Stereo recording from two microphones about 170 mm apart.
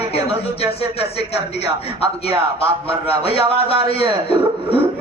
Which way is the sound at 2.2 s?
35° left (ahead or behind).